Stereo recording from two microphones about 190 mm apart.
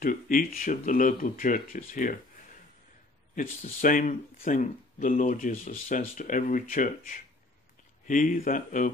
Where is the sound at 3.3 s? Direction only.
45° left (ahead or behind).